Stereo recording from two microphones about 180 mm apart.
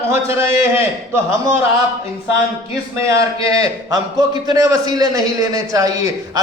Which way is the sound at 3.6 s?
20° right (ahead or behind).